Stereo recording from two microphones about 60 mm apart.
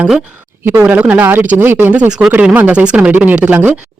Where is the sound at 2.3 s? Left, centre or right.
Right.